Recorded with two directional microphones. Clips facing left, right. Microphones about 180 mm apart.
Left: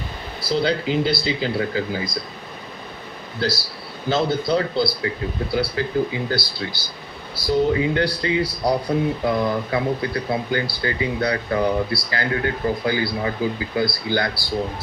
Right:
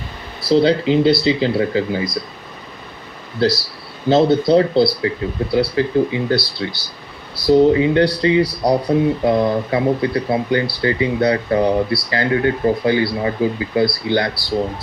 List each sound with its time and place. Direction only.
0.4 s speech: 25° right (ahead or behind)
3.4 s speech: 25° right (ahead or behind)